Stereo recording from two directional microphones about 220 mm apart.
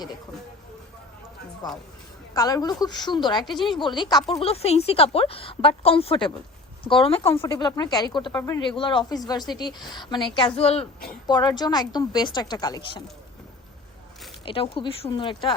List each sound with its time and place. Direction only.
1.6 s a woman's voice: 20° left (ahead or behind)
14.4 s speech: 25° left (ahead or behind)